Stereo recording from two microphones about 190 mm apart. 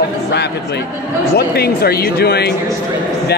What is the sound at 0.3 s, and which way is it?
Speech, 60° left (ahead or behind).